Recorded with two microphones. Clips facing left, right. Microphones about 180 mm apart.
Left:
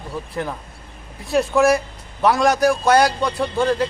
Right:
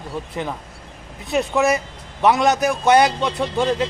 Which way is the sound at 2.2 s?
20° right (ahead or behind).